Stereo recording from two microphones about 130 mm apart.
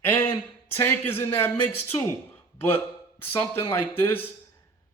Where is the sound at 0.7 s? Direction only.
15° left (ahead or behind).